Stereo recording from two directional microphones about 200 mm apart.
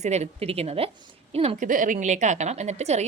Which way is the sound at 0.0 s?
35° right (ahead or behind).